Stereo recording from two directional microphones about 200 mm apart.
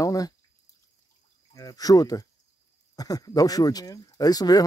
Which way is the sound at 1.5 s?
15° left (ahead or behind).